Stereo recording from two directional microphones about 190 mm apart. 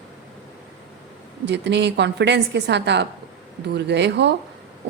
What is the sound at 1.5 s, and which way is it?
Speech, 65° right (ahead or behind).